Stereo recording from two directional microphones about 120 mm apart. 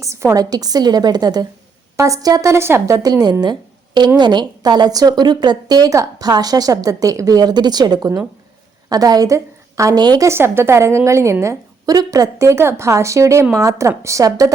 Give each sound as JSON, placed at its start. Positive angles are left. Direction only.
{"t": 0.0, "sound": "a woman's voice", "side_deg": -25}
{"t": 10.2, "sound": "a woman's voice", "side_deg": -20}